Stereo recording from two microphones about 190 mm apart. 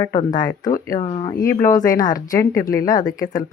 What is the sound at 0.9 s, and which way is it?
Speech, 30° left (ahead or behind).